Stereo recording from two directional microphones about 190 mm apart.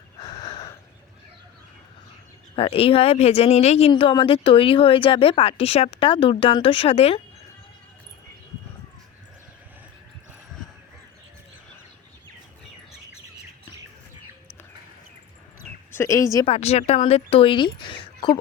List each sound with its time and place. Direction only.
0.2 s a sound: 25° left (ahead or behind)
2.6 s speech: 30° left (ahead or behind)
15.9 s a woman's voice: 15° left (ahead or behind)
16.5 s speech: 35° left (ahead or behind)